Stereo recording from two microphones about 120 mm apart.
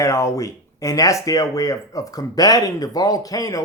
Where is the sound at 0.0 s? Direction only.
25° left (ahead or behind).